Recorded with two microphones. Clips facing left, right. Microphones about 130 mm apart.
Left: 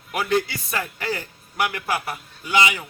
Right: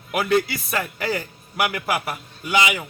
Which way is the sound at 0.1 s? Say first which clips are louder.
Right 2 dB; 10° right (ahead or behind).